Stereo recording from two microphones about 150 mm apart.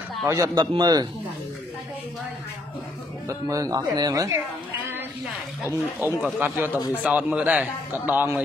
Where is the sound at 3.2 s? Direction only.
20° right (ahead or behind).